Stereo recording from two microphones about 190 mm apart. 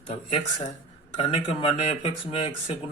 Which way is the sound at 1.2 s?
30° left (ahead or behind).